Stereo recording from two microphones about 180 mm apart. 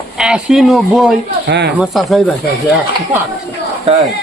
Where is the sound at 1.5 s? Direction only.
70° right (ahead or behind).